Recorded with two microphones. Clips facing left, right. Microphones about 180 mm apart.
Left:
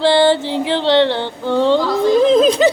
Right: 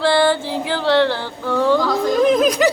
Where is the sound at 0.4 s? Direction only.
25° left (ahead or behind).